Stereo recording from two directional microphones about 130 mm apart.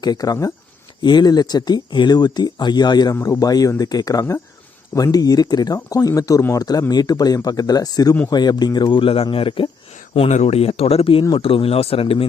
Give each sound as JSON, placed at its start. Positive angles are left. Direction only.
{"t": 0.0, "sound": "speech", "side_deg": 30}
{"t": 10.2, "sound": "speech", "side_deg": 60}